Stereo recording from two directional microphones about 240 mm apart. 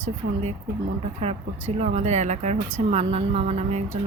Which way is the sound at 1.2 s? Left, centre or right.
Right.